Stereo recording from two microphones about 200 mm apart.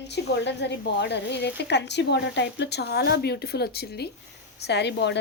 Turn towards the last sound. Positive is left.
turn(degrees=60)  # may be behind; listen again after turning